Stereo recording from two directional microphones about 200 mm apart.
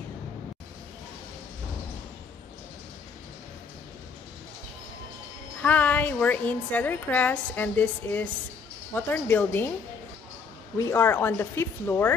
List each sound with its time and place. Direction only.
5.6 s a woman's voice: 5° left (ahead or behind)
10.8 s a woman's voice: 10° left (ahead or behind)